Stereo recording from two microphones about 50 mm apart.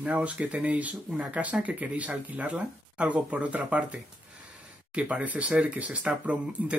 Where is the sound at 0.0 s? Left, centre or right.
Right.